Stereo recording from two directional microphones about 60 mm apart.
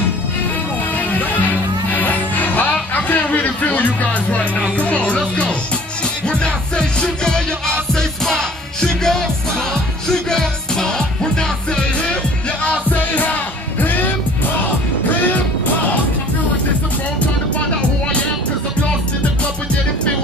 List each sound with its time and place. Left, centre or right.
0.9 s music: left; by 7.7 s centre
8.8 s music: centre
12.6 s music: left